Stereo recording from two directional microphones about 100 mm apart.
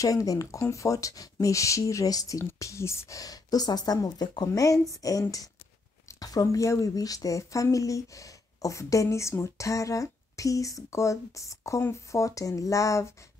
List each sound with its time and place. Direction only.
0.0 s speech: 35° left (ahead or behind)